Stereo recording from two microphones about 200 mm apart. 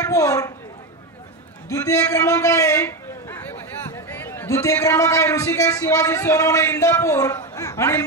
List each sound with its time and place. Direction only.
0.1 s a man's voice: 15° left (ahead or behind)
1.7 s a man's voice: 15° left (ahead or behind)